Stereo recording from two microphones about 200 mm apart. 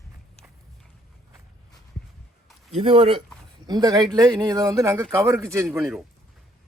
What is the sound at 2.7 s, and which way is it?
A man's voice, 30° right (ahead or behind).